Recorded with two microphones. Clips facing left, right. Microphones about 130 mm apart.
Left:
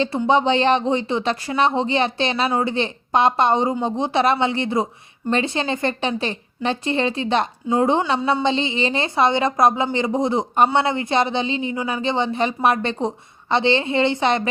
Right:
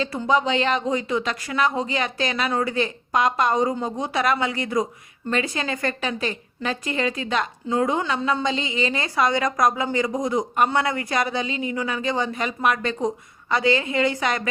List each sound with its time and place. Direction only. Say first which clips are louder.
0.0 s a woman's voice: left 4 dB; 30° left (ahead or behind)